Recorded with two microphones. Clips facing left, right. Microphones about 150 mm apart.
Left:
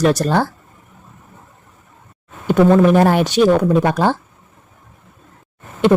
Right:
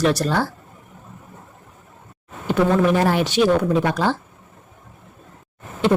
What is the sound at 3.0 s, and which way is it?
Speech, 50° left (ahead or behind).